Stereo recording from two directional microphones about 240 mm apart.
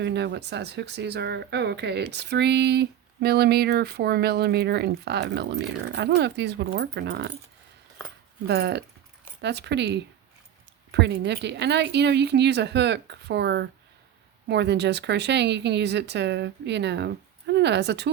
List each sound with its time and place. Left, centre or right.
0.0 s speech: right
8.4 s speech: right